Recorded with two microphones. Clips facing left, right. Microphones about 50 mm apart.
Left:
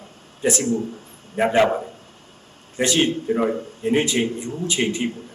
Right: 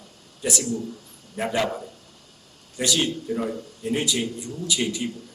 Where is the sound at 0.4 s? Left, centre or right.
Left.